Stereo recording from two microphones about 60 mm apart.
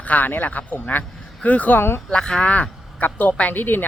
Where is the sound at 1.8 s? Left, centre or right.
Left.